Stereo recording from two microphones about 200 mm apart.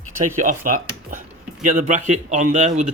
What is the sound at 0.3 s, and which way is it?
A man's voice, 40° right (ahead or behind).